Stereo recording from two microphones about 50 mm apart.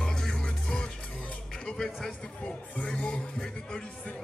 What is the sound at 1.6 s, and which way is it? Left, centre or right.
Music, centre.